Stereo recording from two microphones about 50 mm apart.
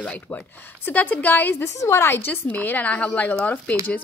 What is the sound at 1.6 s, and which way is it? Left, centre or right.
Speech, left.